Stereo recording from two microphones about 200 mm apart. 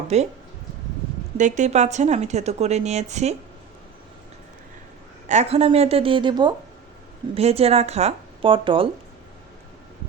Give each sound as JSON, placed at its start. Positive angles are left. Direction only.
{"t": 0.1, "sound": "speech", "side_deg": -35}
{"t": 1.4, "sound": "speech", "side_deg": -40}
{"t": 5.3, "sound": "speech", "side_deg": -35}